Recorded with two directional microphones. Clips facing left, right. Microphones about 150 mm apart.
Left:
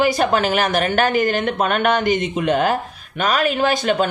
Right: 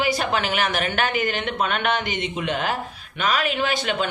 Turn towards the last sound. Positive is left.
turn(degrees=45)  # may be behind; listen again after turning